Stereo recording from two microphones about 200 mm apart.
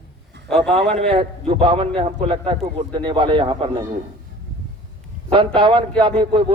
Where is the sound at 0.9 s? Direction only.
25° right (ahead or behind).